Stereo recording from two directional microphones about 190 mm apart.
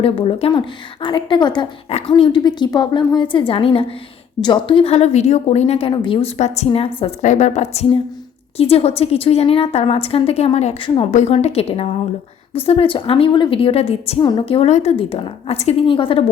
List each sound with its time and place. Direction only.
0.0 s a woman's voice: 30° left (ahead or behind)